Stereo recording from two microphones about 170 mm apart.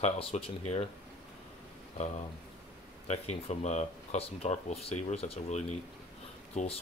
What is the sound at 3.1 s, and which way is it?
Speech, 40° left (ahead or behind).